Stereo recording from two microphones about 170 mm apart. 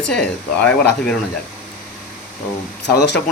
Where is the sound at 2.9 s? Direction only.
85° left.